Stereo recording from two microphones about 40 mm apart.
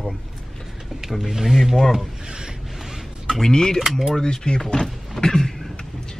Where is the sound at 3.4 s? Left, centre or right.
Centre.